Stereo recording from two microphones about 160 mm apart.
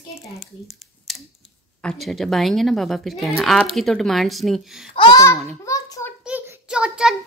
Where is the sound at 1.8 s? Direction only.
Centre (ahead or behind).